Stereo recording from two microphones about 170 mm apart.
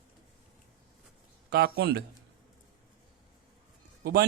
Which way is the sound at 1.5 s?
65° right (ahead or behind).